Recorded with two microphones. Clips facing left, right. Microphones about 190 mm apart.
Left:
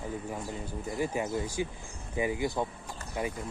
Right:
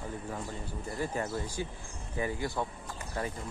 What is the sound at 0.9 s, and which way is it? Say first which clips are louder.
Speech: left 3 dB; 10° left (ahead or behind).